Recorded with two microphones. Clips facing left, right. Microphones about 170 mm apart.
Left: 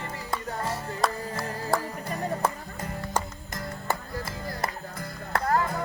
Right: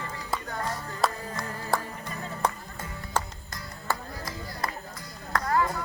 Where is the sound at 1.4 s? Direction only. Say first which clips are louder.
Left 5 dB; 30° left (ahead or behind).